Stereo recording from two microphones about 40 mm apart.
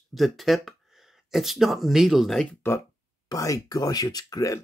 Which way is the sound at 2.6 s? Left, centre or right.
Left.